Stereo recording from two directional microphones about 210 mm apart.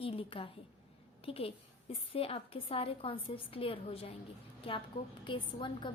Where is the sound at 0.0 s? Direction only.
25° left (ahead or behind).